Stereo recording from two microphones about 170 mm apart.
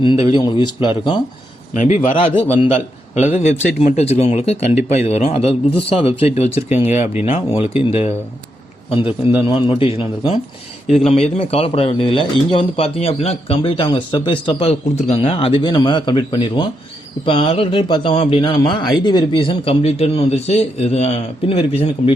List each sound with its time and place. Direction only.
0.0 s speech: 30° left (ahead or behind)
1.7 s a man's voice: 45° left (ahead or behind)
2.1 s a man's voice: 30° left (ahead or behind)